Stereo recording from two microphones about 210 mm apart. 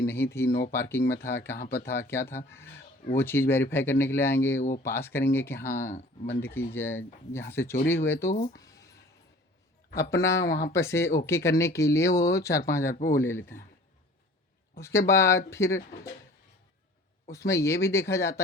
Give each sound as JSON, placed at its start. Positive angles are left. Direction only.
{"t": 0.0, "sound": "speech", "side_deg": 10}
{"t": 8.3, "sound": "speech", "side_deg": 35}
{"t": 8.5, "sound": "a sound", "side_deg": 15}
{"t": 9.9, "sound": "speech", "side_deg": 15}
{"t": 10.3, "sound": "speech", "side_deg": 45}
{"t": 10.7, "sound": "speech", "side_deg": 15}
{"t": 12.9, "sound": "speech", "side_deg": 40}
{"t": 13.1, "sound": "speech", "side_deg": 10}
{"t": 14.8, "sound": "speech", "side_deg": 15}
{"t": 17.3, "sound": "speech", "side_deg": 15}